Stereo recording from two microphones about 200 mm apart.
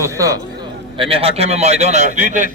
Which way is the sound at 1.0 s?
30° right (ahead or behind).